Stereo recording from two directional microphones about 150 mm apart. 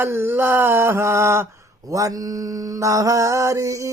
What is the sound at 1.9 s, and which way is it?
Mantra, 20° right (ahead or behind).